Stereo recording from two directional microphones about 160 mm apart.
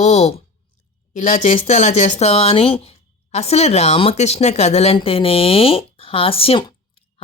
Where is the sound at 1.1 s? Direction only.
50° left (ahead or behind).